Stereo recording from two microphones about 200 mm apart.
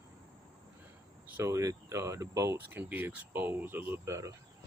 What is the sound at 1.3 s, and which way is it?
Speech, 15° right (ahead or behind).